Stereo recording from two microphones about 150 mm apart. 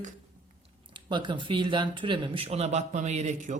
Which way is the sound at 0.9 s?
30° right (ahead or behind).